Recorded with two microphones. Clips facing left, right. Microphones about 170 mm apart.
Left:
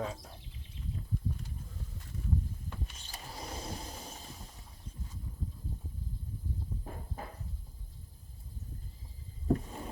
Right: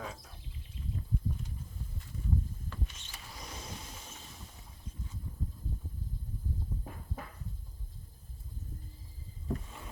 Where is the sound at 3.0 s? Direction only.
35° left (ahead or behind).